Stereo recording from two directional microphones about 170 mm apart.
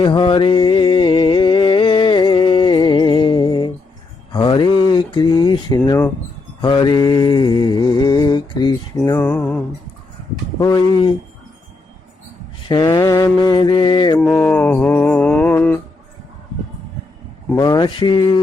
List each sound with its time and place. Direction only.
0.0 s a sound: 30° left (ahead or behind)
6.6 s mantra: 25° left (ahead or behind)
9.0 s music: 15° left (ahead or behind)
10.6 s mantra: 25° left (ahead or behind)
12.6 s mantra: 25° left (ahead or behind)
14.2 s mantra: 10° left (ahead or behind)
17.5 s mantra: 25° left (ahead or behind)